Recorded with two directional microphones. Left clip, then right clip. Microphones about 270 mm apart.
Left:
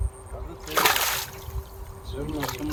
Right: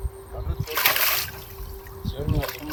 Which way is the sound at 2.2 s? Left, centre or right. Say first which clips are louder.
Right 1 dB; centre.